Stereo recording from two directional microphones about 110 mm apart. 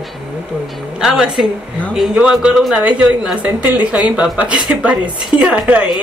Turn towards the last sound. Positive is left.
turn(degrees=-10)  # may be behind; listen again after turning